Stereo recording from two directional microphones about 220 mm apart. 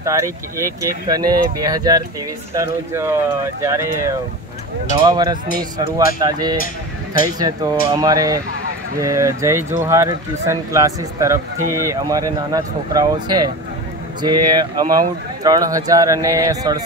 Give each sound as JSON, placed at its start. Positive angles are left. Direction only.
{"t": 0.0, "sound": "speech", "side_deg": -15}
{"t": 7.2, "sound": "speech", "side_deg": -15}